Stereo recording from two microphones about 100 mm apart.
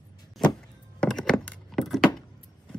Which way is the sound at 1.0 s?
5° left (ahead or behind).